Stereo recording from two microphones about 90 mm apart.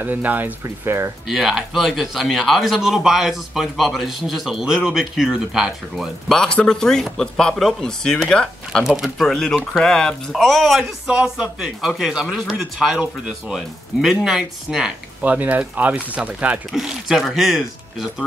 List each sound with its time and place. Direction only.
0.0 s speech: 20° right (ahead or behind)
1.2 s speech: 5° right (ahead or behind)
8.8 s speech: 5° right (ahead or behind)
14.2 s speech: 5° right (ahead or behind)